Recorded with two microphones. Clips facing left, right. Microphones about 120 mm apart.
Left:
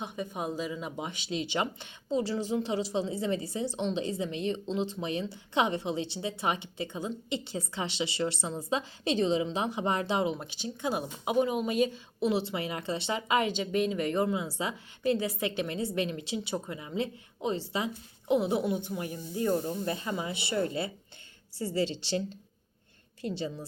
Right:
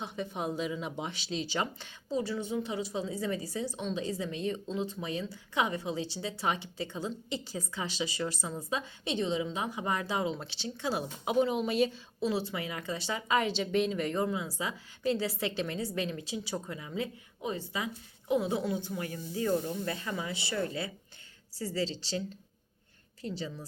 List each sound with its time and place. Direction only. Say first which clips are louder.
0.0 s speech: left 1 dB; 5° left (ahead or behind)
1.5 s a woman's voice: left 2 dB; 15° left (ahead or behind)
23.3 s a woman's voice: left 3 dB; 25° left (ahead or behind)